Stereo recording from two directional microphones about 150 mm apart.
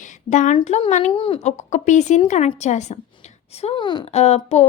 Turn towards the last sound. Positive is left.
turn(degrees=45)  # may be behind; listen again after turning